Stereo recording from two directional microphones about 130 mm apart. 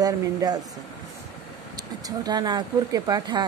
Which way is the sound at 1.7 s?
30° right (ahead or behind).